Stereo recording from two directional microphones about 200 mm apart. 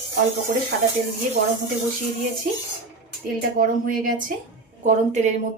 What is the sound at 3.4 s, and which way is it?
A woman's voice, 45° right (ahead or behind).